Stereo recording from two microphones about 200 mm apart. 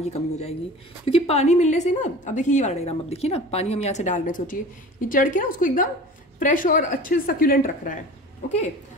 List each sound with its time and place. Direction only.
0.0 s a woman's voice: 30° left (ahead or behind)